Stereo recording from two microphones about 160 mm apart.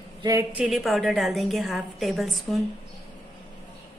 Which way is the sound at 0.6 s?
Centre (ahead or behind).